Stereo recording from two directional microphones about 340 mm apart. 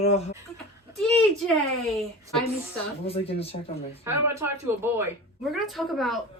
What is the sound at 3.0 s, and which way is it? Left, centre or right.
Speech, centre.